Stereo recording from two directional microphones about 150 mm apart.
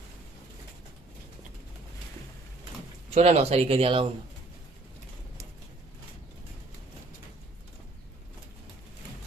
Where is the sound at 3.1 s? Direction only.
45° right (ahead or behind).